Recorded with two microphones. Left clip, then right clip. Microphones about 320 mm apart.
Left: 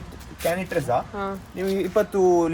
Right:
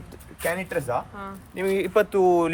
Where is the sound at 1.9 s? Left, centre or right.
Right.